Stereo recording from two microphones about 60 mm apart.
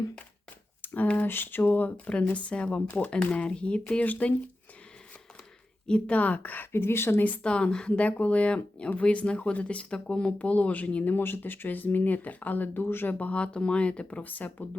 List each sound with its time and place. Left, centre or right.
0.9 s speech: left
5.9 s speech: left
7.4 s speech: centre